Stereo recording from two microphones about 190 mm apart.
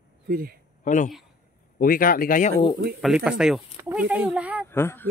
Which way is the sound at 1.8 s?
50° left (ahead or behind).